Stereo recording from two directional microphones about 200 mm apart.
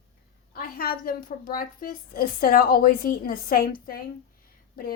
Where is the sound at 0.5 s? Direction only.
45° left (ahead or behind).